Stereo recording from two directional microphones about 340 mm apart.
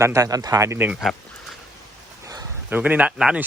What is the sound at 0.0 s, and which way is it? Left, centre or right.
Speech, centre.